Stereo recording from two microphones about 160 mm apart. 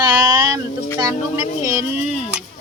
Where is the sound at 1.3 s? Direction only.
20° right (ahead or behind).